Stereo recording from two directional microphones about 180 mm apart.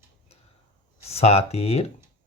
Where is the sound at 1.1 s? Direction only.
35° left (ahead or behind).